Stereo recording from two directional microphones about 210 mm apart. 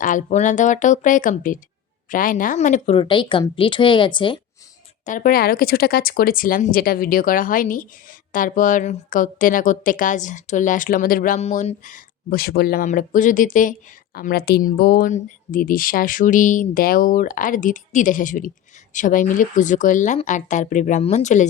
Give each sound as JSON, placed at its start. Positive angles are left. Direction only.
{"t": 0.0, "sound": "a woman's voice", "side_deg": 35}
{"t": 5.0, "sound": "a woman's voice", "side_deg": 40}